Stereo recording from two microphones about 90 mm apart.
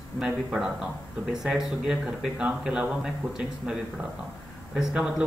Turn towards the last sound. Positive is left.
turn(degrees=-5)  # may be behind; listen again after turning